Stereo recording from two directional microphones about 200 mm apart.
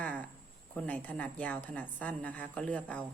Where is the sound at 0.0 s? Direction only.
5° left (ahead or behind).